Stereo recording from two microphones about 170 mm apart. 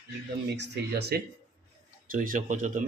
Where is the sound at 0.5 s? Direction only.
85° right.